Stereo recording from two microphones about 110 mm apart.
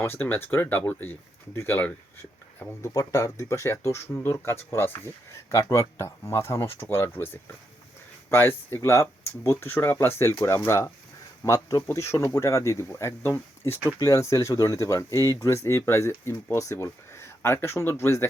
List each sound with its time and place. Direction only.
0.0 s speech: 20° left (ahead or behind)
2.9 s speech: 30° left (ahead or behind)